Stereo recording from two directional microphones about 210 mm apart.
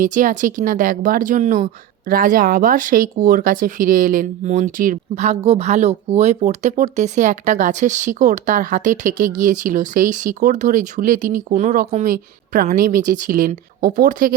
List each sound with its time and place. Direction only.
0.0 s speech: 40° right (ahead or behind)